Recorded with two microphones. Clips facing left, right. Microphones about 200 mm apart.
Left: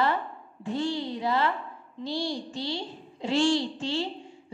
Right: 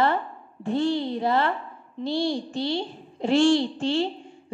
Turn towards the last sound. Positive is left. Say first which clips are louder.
# right 6 dB
turn(degrees=-55)  # may be behind; listen again after turning